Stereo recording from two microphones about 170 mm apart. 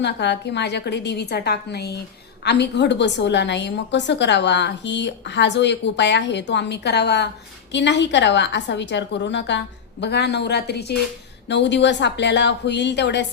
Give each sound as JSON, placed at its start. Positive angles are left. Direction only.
{"t": 0.0, "sound": "a woman's voice", "side_deg": 90}
{"t": 2.4, "sound": "a woman's voice", "side_deg": 85}
{"t": 7.7, "sound": "a woman's voice", "side_deg": 90}
{"t": 11.4, "sound": "a woman's voice", "side_deg": 90}